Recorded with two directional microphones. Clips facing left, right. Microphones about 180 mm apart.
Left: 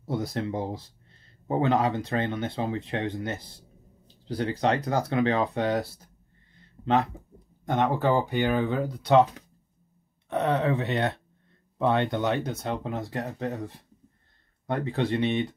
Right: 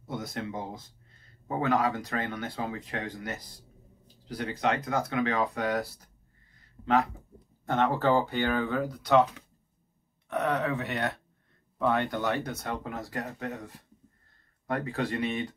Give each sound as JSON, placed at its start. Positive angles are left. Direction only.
{"t": 0.0, "sound": "speech", "side_deg": 35}
{"t": 6.5, "sound": "a sound", "side_deg": 25}
{"t": 7.6, "sound": "speech", "side_deg": 15}
{"t": 10.2, "sound": "speech", "side_deg": 25}
{"t": 13.1, "sound": "speech", "side_deg": 35}